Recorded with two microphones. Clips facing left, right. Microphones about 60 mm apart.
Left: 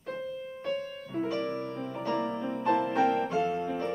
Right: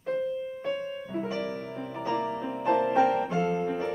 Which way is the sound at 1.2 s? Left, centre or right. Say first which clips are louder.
Left 1 dB; centre.